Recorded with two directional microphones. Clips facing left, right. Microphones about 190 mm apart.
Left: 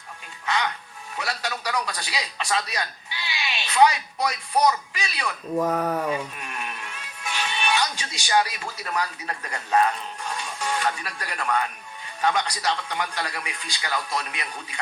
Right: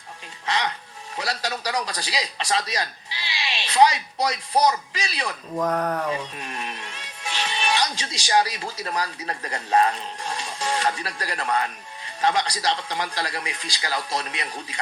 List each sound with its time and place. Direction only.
0.4 s a man's voice: 35° right (ahead or behind)
5.5 s speech: 5° left (ahead or behind)
6.3 s a man's voice: 30° right (ahead or behind)